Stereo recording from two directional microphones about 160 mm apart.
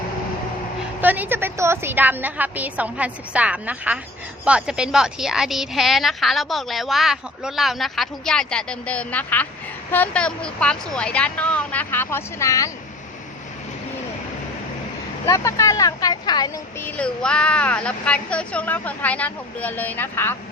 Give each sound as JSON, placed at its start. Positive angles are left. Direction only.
{"t": 1.0, "sound": "a woman's voice", "side_deg": -10}
{"t": 15.3, "sound": "speech", "side_deg": 20}
{"t": 16.8, "sound": "a woman's voice", "side_deg": 5}